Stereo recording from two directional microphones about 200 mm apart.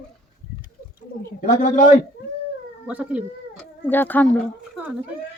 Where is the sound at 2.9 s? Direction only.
5° right (ahead or behind).